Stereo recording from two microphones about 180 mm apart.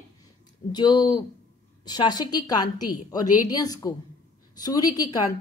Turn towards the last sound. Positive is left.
turn(degrees=20)  # may be behind; listen again after turning